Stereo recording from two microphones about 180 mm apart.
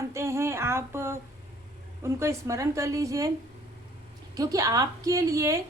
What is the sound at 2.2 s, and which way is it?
A woman's voice, 15° right (ahead or behind).